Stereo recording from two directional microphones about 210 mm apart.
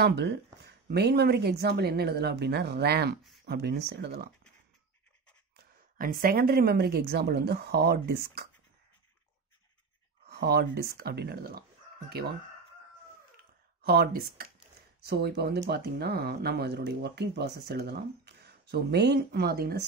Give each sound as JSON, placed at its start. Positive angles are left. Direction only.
{"t": 0.0, "sound": "speech", "side_deg": -50}
{"t": 5.6, "sound": "speech", "side_deg": -45}
{"t": 10.2, "sound": "speech", "side_deg": -50}
{"t": 13.8, "sound": "speech", "side_deg": -45}